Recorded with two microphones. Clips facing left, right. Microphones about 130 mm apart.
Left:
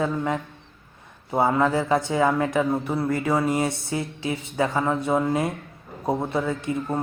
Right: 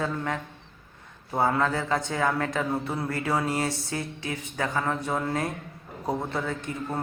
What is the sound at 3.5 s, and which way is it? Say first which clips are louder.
A man's voice: left 4 dB; 20° left (ahead or behind).